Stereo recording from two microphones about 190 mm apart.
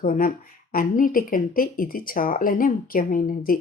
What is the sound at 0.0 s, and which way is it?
A woman's voice, 45° left (ahead or behind).